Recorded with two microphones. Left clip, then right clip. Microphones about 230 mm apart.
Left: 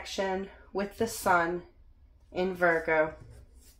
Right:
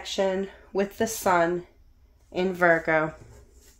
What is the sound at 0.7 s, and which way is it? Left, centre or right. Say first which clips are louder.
Speech: right 5 dB; right.